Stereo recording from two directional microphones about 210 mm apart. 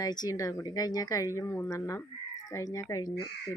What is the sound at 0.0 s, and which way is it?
Speech, 20° left (ahead or behind).